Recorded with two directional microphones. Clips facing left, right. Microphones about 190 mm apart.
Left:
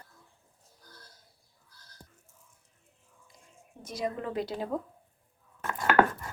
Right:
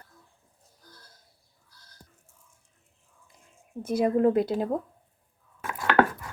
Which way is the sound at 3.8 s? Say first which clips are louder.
Right 12 dB; 55° right (ahead or behind).